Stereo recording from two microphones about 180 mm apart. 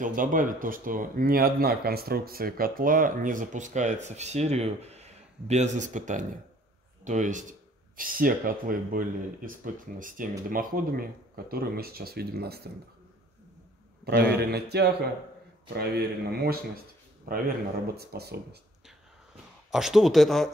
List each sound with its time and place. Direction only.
0.0 s speech: 50° right (ahead or behind)
14.4 s speech: 65° right (ahead or behind)
19.7 s speech: centre (ahead or behind)